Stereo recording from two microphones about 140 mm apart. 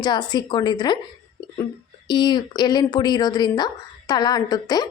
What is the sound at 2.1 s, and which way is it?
Speech, 30° left (ahead or behind).